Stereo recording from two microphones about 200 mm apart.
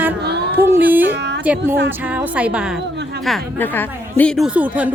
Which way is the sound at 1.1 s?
60° right (ahead or behind).